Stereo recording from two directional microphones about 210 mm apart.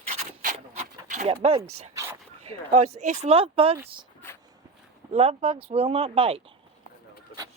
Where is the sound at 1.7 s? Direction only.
30° right (ahead or behind).